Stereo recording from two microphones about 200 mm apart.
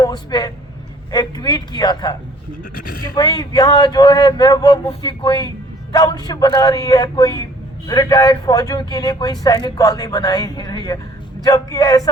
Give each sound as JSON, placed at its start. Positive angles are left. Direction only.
{"t": 0.0, "sound": "a man's voice", "side_deg": 20}
{"t": 2.7, "sound": "speech", "side_deg": 45}
{"t": 3.2, "sound": "speech", "side_deg": 20}